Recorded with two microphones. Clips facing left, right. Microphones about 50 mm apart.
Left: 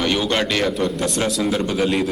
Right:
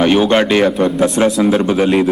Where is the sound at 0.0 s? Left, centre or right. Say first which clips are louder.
Right 9 dB; right.